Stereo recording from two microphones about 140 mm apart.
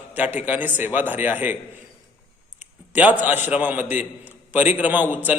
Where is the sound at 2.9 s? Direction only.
10° right (ahead or behind).